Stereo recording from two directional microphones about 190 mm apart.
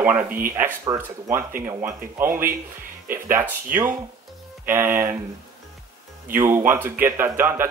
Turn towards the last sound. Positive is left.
turn(degrees=-10)  # may be behind; listen again after turning